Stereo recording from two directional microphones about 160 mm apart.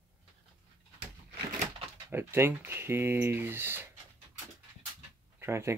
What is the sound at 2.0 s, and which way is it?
Speech, 15° right (ahead or behind).